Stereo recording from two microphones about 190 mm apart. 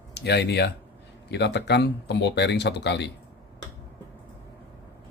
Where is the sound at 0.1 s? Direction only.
60° left (ahead or behind).